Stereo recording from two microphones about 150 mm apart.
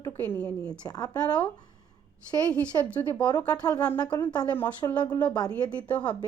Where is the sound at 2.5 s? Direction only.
10° left (ahead or behind).